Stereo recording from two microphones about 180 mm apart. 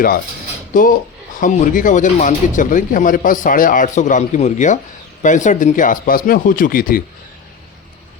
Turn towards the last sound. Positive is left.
turn(degrees=55)  # may be behind; listen again after turning